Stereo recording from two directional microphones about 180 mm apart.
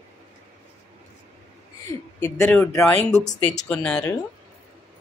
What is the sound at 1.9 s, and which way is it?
A woman's voice, 15° left (ahead or behind).